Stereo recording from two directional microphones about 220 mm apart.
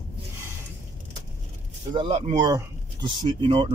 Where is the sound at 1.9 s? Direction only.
25° right (ahead or behind).